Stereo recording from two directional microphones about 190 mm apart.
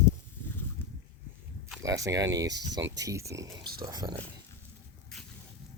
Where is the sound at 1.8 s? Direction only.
15° right (ahead or behind).